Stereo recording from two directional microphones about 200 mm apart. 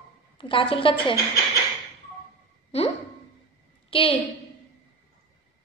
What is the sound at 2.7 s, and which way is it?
A woman's voice, 30° left (ahead or behind).